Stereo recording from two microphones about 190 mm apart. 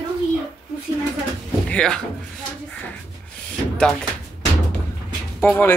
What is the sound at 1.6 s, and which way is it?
Speech, 5° left (ahead or behind).